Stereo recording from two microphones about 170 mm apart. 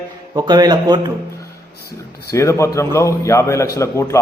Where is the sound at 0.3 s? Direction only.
25° right (ahead or behind).